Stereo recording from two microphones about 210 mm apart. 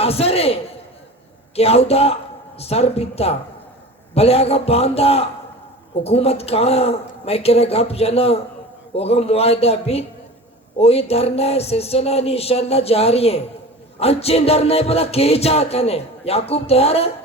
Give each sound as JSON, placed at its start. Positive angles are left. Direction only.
{"t": 0.0, "sound": "music", "side_deg": 30}